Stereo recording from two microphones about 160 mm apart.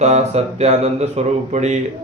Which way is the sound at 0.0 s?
45° right (ahead or behind).